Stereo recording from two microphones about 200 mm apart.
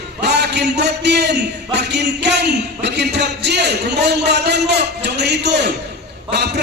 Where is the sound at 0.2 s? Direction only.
55° right (ahead or behind).